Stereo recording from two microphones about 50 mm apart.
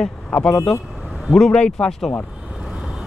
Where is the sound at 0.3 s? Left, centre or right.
Centre.